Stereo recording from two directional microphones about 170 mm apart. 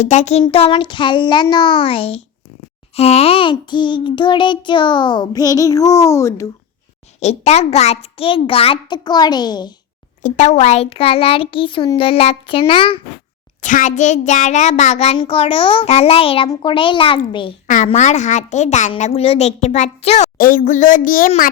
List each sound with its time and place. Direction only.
0.0 s a woman's voice: 45° left (ahead or behind)
0.4 s a sound: 30° left (ahead or behind); by 6.5 s 15° left (ahead or behind)
7.2 s a child's voice: 40° left (ahead or behind); by 9.7 s 25° left (ahead or behind)
10.2 s a child's voice: 45° left (ahead or behind)
13.6 s a woman's voice: 45° left (ahead or behind)
16.5 s a sound: 30° left (ahead or behind)
17.8 s a woman's voice: 45° left (ahead or behind)
20.4 s speech: 55° left (ahead or behind)